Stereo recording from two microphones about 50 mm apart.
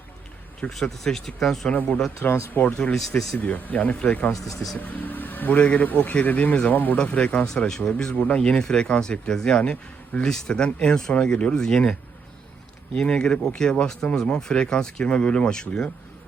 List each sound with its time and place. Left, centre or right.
0.7 s speech: centre
1.6 s speech: centre
2.5 s speech: left
2.9 s speech: centre
3.3 s speech: left
5.5 s speech: left
13.0 s speech: centre